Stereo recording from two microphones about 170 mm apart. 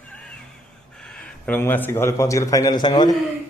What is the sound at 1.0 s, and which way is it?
Speech, 5° left (ahead or behind).